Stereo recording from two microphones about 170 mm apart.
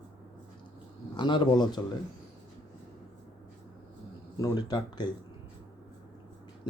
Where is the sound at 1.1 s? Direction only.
30° left (ahead or behind).